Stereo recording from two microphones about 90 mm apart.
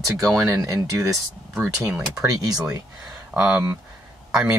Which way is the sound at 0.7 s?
30° right (ahead or behind).